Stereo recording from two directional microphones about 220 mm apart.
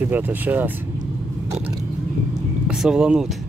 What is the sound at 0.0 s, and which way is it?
Speech, 10° right (ahead or behind).